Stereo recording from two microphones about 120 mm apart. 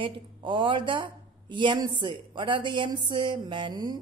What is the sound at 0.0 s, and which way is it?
Speech, 45° right (ahead or behind).